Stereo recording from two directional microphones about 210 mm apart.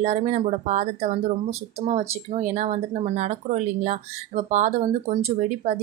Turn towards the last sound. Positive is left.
turn(degrees=-30)  # may be behind; listen again after turning